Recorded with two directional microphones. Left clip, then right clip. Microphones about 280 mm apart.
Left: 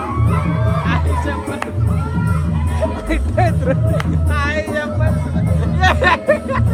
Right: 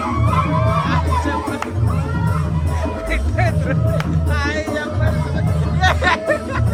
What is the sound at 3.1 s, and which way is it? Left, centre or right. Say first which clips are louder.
Music: left 3 dB; centre.